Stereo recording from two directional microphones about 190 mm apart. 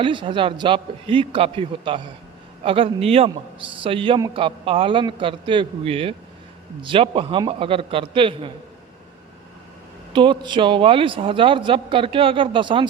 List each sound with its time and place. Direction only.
0.0 s a man's voice: 25° right (ahead or behind)
10.1 s a man's voice: 25° right (ahead or behind)